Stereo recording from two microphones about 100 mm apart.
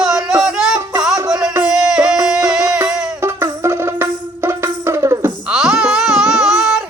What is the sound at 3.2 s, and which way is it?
Music, 30° right (ahead or behind).